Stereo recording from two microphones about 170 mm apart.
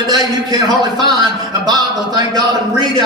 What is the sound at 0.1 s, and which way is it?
A man's voice, 25° right (ahead or behind).